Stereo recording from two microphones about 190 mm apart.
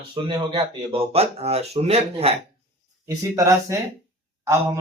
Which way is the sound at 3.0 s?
15° right (ahead or behind).